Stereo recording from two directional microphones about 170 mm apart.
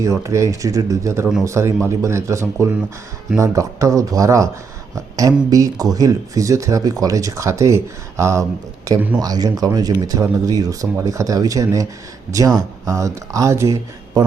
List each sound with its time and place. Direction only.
0.0 s speech: 20° right (ahead or behind)